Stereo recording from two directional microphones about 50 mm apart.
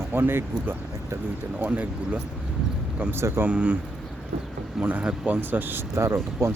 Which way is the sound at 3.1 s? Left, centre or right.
Right.